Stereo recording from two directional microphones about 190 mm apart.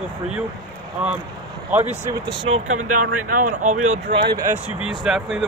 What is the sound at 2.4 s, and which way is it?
Speech, 35° right (ahead or behind).